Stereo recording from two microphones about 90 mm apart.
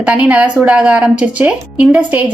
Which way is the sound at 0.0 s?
15° right (ahead or behind).